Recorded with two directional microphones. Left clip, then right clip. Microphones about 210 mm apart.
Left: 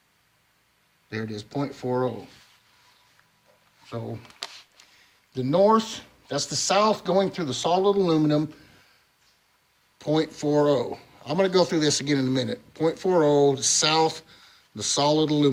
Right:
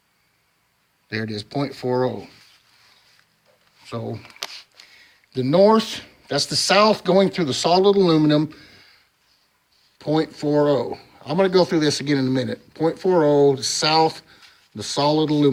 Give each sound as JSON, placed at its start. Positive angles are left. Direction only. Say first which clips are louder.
{"t": 1.1, "sound": "speech", "louder": "right 5 dB", "side_deg": -40}
{"t": 3.8, "sound": "shuffling cards", "louder": "right 5 dB", "side_deg": -45}
{"t": 5.3, "sound": "speech", "louder": "right 4 dB", "side_deg": -35}
{"t": 10.0, "sound": "speech", "louder": "right 3 dB", "side_deg": -25}